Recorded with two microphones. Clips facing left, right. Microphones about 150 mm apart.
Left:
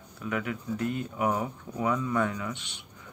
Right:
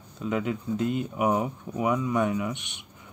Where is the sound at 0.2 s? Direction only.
20° right (ahead or behind).